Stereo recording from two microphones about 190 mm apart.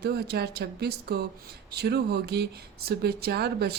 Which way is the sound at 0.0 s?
55° right (ahead or behind).